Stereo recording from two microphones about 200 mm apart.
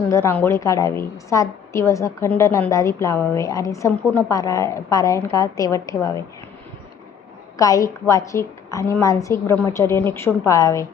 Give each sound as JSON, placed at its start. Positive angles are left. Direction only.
{"t": 0.1, "sound": "a woman's voice", "side_deg": 15}
{"t": 7.5, "sound": "a woman's voice", "side_deg": 15}